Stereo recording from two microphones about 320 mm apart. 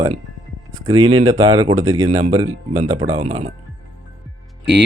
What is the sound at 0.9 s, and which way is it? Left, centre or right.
Speech, centre.